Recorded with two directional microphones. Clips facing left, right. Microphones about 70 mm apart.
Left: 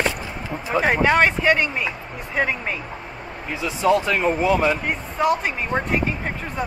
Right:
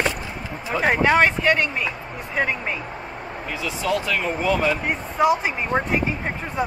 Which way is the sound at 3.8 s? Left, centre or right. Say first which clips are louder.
Left 5 dB; left.